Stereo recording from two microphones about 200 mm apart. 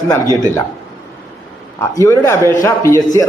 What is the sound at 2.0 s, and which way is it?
A man's voice, 15° left (ahead or behind).